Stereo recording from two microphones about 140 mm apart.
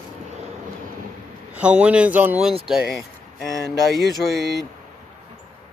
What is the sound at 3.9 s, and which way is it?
Mantra, centre (ahead or behind).